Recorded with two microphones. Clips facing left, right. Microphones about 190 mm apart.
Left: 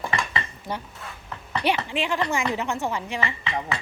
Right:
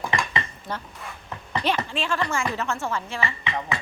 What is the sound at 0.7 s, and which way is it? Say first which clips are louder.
A woman's voice: left 2 dB; 15° left (ahead or behind).